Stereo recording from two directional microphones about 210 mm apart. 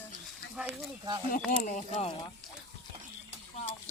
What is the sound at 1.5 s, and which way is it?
Speech, 30° left (ahead or behind).